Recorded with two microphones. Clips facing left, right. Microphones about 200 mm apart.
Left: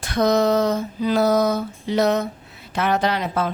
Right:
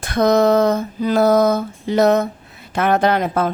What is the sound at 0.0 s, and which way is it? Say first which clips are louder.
A woman's voice: right 4 dB; 55° right (ahead or behind).